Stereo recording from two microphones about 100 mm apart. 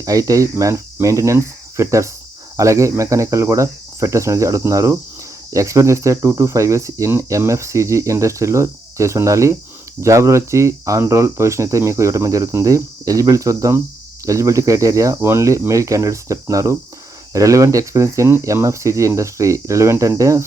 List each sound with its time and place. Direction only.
0.0 s speech: 35° right (ahead or behind)